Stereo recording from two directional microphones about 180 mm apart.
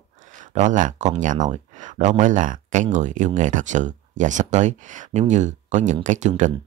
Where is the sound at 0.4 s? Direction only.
45° right (ahead or behind).